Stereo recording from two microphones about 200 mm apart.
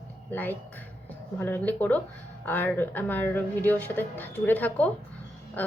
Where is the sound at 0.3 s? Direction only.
10° left (ahead or behind).